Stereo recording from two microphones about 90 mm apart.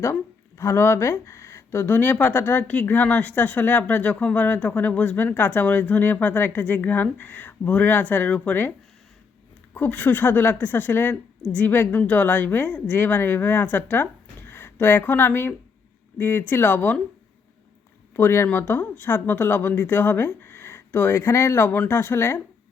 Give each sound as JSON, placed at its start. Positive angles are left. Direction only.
{"t": 0.0, "sound": "speech", "side_deg": 30}
{"t": 9.7, "sound": "speech", "side_deg": 20}
{"t": 18.2, "sound": "speech", "side_deg": 30}